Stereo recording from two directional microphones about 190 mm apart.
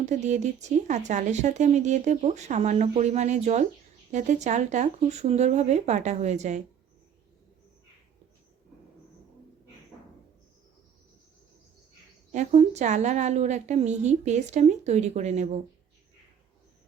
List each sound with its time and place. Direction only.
0.0 s speech: 40° right (ahead or behind)
12.3 s speech: 35° right (ahead or behind)